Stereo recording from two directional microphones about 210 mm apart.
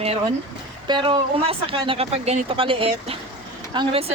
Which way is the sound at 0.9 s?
20° right (ahead or behind).